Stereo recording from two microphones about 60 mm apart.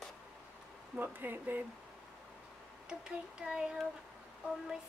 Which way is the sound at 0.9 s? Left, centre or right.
Right.